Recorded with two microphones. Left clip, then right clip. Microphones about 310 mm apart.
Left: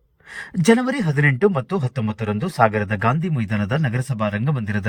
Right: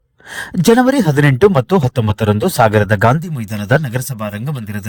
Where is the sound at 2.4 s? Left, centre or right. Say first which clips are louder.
Right 5 dB; right.